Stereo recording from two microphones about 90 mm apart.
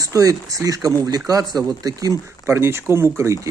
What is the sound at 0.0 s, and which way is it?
Speech, 40° right (ahead or behind).